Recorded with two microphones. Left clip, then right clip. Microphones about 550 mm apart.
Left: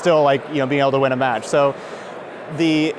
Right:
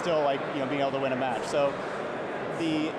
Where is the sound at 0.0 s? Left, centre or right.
Left.